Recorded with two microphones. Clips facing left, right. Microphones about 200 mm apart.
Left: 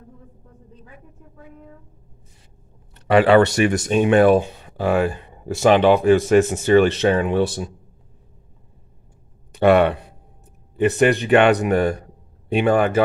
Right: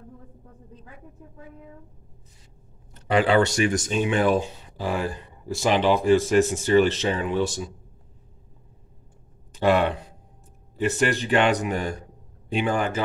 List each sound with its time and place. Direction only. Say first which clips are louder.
2.9 s speech: left 6 dB; 65° left (ahead or behind)
9.5 s a man's voice: left 6 dB; 60° left (ahead or behind)